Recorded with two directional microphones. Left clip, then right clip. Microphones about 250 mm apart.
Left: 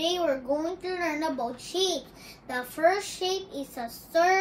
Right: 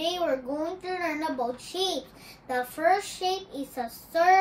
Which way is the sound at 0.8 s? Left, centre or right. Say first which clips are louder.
Right 1 dB; centre.